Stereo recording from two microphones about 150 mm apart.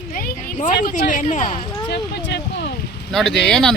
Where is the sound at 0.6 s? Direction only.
65° left (ahead or behind).